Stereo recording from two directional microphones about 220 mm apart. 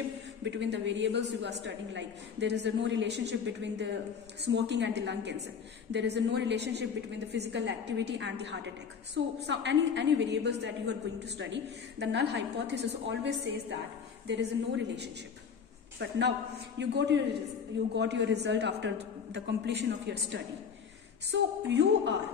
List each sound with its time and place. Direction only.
0.4 s a woman's voice: 55° right (ahead or behind)